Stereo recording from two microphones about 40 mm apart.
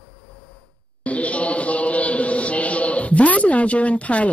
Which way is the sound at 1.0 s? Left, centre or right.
Left.